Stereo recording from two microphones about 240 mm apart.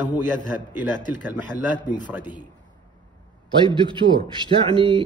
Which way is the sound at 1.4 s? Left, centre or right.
Centre.